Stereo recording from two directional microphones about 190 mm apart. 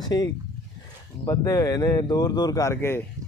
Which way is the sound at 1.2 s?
20° left (ahead or behind).